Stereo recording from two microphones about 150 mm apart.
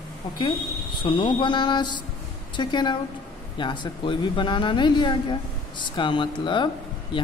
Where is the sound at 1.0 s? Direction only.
35° left (ahead or behind).